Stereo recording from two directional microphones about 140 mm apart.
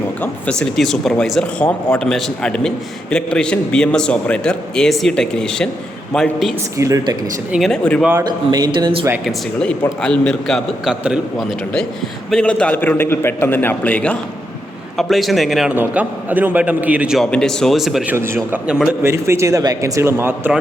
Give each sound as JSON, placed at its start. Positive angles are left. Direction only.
{"t": 0.2, "sound": "speech", "side_deg": 10}
{"t": 6.7, "sound": "speech", "side_deg": -25}
{"t": 7.5, "sound": "speech", "side_deg": 5}
{"t": 8.2, "sound": "speech", "side_deg": -30}
{"t": 9.6, "sound": "speech", "side_deg": 5}
{"t": 12.3, "sound": "a man's voice", "side_deg": 5}
{"t": 15.7, "sound": "a man's voice", "side_deg": -15}
{"t": 17.2, "sound": "speech", "side_deg": 5}
{"t": 18.1, "sound": "a man's voice", "side_deg": -15}
{"t": 18.5, "sound": "a man's voice", "side_deg": -5}
{"t": 19.0, "sound": "speech", "side_deg": -20}